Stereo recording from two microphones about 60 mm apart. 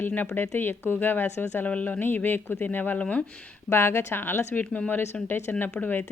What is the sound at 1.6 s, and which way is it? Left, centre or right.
Speech, left.